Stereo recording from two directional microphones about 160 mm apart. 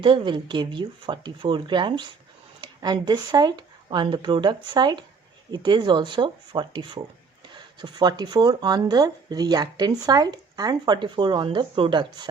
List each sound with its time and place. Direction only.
0.0 s speech: 30° right (ahead or behind)